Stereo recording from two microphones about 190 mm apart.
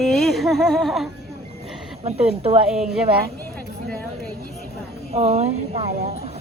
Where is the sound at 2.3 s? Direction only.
30° right (ahead or behind).